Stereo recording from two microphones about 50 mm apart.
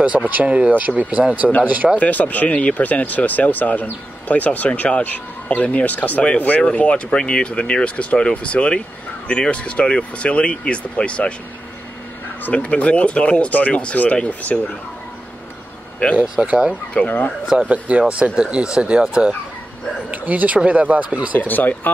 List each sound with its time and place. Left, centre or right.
0.3 s speech: right
2.0 s speech: left
12.5 s speech: left
16.2 s speech: right
17.0 s speech: left
17.6 s speech: right
18.0 s speech: centre
20.1 s speech: right
21.4 s speech: left